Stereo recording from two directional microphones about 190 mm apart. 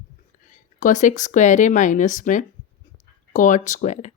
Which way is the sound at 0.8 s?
40° left (ahead or behind).